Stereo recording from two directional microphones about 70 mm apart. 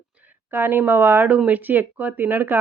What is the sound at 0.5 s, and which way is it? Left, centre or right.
A woman's voice, right.